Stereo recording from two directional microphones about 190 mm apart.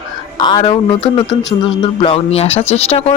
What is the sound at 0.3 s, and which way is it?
Speech, 25° left (ahead or behind).